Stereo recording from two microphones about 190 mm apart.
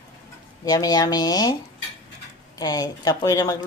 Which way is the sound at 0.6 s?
20° left (ahead or behind).